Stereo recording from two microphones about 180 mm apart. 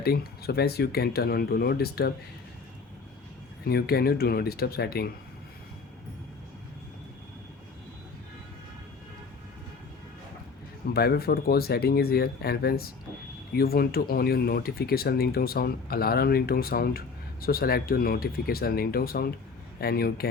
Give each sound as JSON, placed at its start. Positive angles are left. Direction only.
{"t": 0.0, "sound": "speech", "side_deg": 60}
{"t": 3.6, "sound": "speech", "side_deg": 60}
{"t": 10.9, "sound": "speech", "side_deg": 60}